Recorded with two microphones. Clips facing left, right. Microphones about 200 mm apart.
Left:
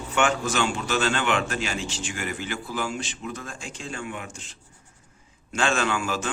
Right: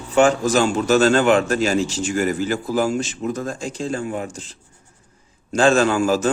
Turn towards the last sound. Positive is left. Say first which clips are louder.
# right 9 dB
turn(degrees=-40)  # may be behind; listen again after turning